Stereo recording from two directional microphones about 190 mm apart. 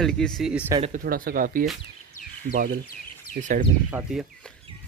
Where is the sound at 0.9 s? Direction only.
50° right (ahead or behind).